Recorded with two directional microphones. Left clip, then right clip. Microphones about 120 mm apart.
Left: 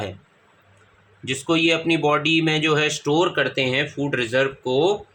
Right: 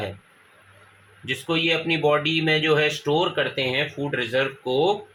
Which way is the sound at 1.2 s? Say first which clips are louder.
Left 3 dB; 40° left (ahead or behind).